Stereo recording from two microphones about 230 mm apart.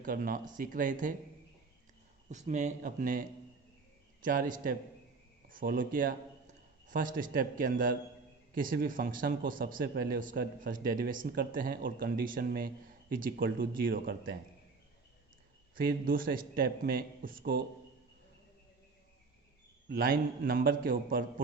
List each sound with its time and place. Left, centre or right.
0.0 s speech: right
2.3 s a man's voice: right
15.7 s speech: right
19.9 s speech: right